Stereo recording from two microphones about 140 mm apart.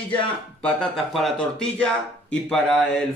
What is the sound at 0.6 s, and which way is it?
Speech, 5° left (ahead or behind).